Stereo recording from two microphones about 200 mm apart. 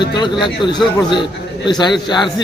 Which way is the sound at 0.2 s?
20° left (ahead or behind).